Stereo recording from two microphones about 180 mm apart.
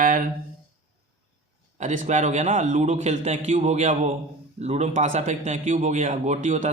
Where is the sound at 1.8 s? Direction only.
40° right (ahead or behind).